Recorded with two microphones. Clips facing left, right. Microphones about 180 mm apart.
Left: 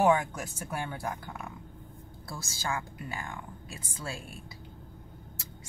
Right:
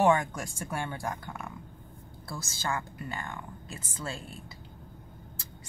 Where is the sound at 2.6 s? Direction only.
10° left (ahead or behind).